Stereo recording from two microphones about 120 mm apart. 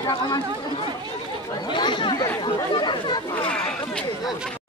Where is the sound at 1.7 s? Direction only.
40° left (ahead or behind).